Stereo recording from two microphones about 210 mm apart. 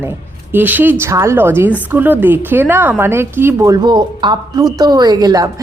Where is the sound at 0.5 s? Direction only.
10° right (ahead or behind).